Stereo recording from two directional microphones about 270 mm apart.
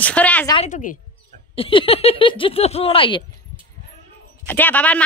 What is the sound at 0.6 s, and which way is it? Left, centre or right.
Speech, left.